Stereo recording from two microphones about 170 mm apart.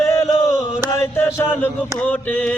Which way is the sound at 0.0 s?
15° left (ahead or behind).